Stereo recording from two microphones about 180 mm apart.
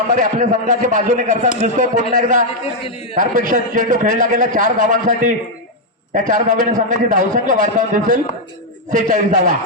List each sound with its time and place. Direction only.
0.1 s a man's voice: 45° right (ahead or behind)